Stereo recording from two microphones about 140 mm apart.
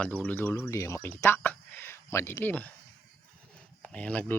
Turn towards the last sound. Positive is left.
turn(degrees=10)  # may be behind; listen again after turning